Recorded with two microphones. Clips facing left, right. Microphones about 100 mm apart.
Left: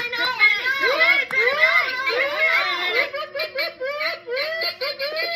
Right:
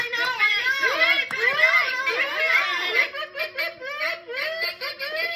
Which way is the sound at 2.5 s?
5° left (ahead or behind).